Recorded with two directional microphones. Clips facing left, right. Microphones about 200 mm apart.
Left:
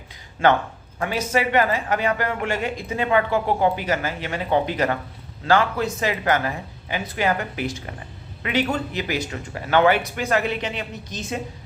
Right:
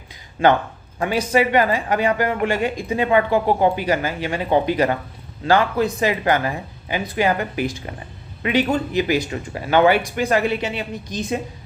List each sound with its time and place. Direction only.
0.9 s speech: 15° right (ahead or behind)